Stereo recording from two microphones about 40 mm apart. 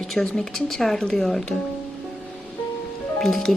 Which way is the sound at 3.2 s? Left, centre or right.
Centre.